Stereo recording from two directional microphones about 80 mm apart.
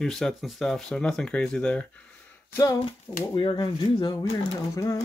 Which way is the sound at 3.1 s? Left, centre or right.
Left.